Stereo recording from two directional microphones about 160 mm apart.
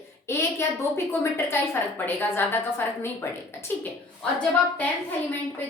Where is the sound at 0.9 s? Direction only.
15° left (ahead or behind).